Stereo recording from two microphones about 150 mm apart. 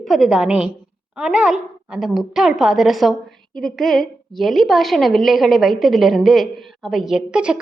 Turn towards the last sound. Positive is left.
turn(degrees=-5)  # may be behind; listen again after turning